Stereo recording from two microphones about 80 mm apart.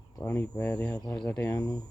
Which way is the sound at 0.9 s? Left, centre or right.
Left.